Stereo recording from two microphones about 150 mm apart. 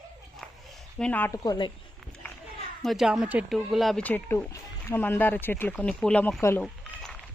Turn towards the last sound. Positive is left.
turn(degrees=0)  # may be behind; listen again after turning